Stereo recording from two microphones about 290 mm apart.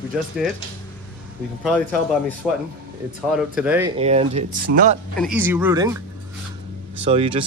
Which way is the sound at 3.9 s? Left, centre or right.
Right.